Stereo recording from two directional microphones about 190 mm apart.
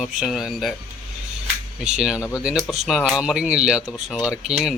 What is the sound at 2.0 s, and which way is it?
Speech, 5° right (ahead or behind).